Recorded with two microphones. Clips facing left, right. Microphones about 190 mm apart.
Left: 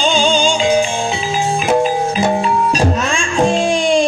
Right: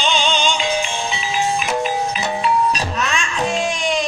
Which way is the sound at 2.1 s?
50° left (ahead or behind).